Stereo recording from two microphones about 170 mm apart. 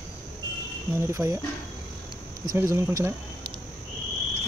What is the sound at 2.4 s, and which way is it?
Speech, 15° right (ahead or behind).